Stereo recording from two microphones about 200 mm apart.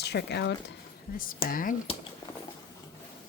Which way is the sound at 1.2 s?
45° left (ahead or behind).